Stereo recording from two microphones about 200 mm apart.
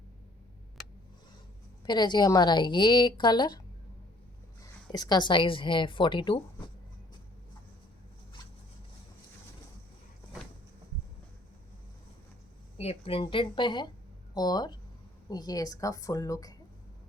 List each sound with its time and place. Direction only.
1.8 s a woman's voice: 20° left (ahead or behind)
4.9 s a woman's voice: 20° left (ahead or behind)
12.7 s a woman's voice: 30° left (ahead or behind)